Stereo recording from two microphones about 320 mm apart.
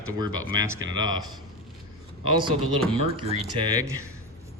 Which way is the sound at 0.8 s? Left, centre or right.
Right.